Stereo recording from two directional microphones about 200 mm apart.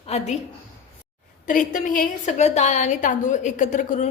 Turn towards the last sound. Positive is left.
turn(degrees=40)  # may be behind; listen again after turning